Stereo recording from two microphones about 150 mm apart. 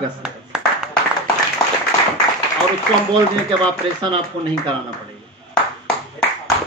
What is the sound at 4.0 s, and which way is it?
Speech, 30° right (ahead or behind).